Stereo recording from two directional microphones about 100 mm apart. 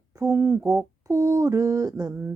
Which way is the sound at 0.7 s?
35° right (ahead or behind).